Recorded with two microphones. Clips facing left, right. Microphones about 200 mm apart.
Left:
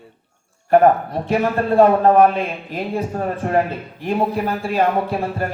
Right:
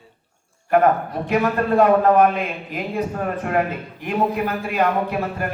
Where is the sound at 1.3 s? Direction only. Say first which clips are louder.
Left 1 dB; 30° left (ahead or behind).